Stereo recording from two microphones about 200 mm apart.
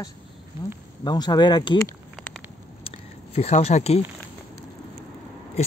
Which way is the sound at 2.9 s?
30° left (ahead or behind).